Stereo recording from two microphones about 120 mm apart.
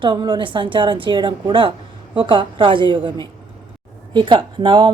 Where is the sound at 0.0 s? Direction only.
35° right (ahead or behind).